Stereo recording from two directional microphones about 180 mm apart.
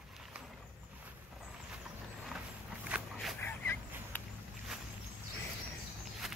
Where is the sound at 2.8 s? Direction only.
5° right (ahead or behind).